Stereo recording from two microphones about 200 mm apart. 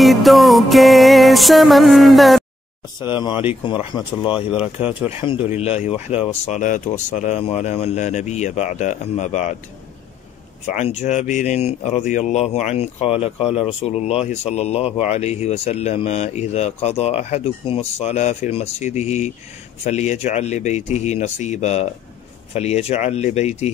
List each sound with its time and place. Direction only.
0.0 s music: centre (ahead or behind)
3.0 s speech: 20° left (ahead or behind)
10.7 s speech: 35° left (ahead or behind)